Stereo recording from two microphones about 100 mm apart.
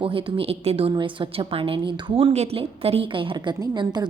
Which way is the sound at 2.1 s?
85° right.